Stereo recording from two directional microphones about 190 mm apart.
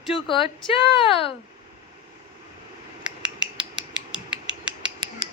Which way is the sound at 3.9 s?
5° right (ahead or behind).